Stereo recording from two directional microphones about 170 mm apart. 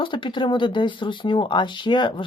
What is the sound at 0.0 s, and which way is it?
Speech, 30° left (ahead or behind).